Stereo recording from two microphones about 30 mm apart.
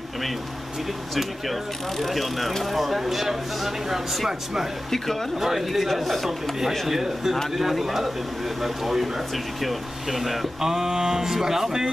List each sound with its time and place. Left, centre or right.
1.1 s speech: centre
5.4 s speech: centre
6.9 s speech: centre
10.6 s speech: centre